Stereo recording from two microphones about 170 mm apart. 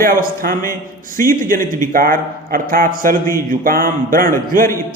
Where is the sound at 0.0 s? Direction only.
55° right (ahead or behind).